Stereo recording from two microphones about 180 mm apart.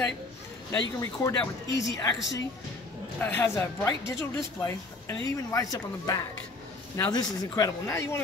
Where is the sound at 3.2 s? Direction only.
15° left (ahead or behind).